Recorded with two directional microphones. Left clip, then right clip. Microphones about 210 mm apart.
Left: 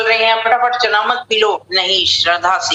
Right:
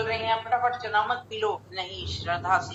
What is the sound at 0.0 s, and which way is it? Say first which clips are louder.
A man's voice: left 14 dB; 50° left (ahead or behind).